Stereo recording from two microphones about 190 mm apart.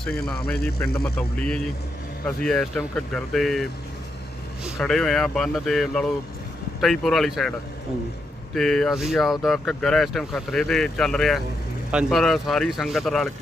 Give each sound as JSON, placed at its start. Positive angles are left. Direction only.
{"t": 0.3, "sound": "speech", "side_deg": 5}
{"t": 8.5, "sound": "speech", "side_deg": 0}